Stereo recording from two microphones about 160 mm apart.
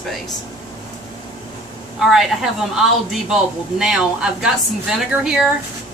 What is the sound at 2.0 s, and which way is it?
A woman's voice, 5° right (ahead or behind).